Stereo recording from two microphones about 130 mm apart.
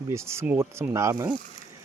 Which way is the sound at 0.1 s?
20° right (ahead or behind).